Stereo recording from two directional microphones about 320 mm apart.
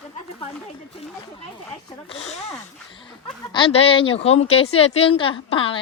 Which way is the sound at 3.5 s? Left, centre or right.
Centre.